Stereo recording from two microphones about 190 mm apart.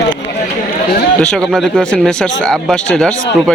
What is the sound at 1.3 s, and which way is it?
Speech, centre (ahead or behind).